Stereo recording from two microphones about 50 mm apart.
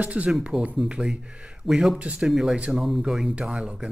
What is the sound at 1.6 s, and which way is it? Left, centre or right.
Speech, centre.